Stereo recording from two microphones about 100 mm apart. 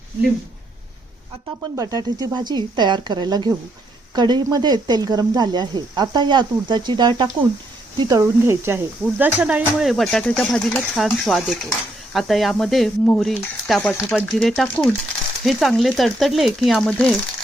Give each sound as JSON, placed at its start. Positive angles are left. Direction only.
{"t": 1.7, "sound": "speech", "side_deg": -35}
{"t": 8.1, "sound": "speech", "side_deg": -25}
{"t": 9.7, "sound": "speech", "side_deg": 0}